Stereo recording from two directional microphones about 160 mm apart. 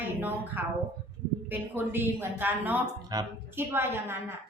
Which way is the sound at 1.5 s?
10° right (ahead or behind).